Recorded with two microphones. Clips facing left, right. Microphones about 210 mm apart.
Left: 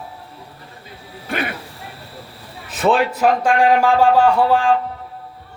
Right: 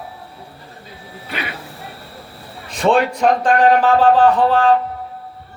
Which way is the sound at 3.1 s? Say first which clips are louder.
Right 1 dB; 10° left (ahead or behind).